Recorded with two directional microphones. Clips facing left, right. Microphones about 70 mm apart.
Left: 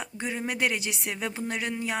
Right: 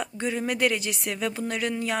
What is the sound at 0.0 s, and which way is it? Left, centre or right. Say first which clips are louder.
A woman's voice: right 4 dB; centre.